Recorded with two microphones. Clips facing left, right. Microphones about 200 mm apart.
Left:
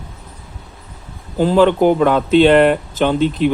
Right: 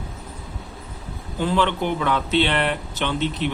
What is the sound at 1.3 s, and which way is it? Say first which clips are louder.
Speech: left 9 dB; 40° left (ahead or behind).